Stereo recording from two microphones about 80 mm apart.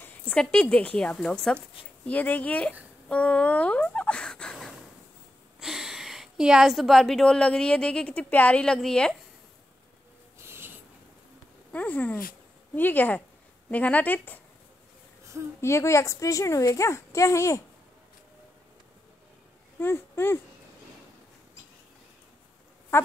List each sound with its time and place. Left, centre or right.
0.0 s a woman's voice: centre
2.0 s a woman's voice: left
5.6 s a woman's voice: centre
10.4 s a sound: right
11.7 s a woman's voice: left
15.6 s speech: left
19.8 s speech: left
22.9 s speech: left